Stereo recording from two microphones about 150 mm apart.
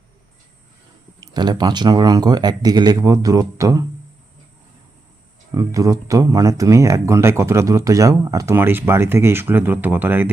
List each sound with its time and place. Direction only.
1.2 s speech: 30° right (ahead or behind)
5.5 s speech: 25° right (ahead or behind)